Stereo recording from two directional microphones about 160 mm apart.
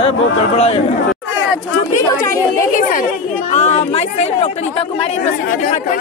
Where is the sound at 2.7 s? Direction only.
55° left (ahead or behind).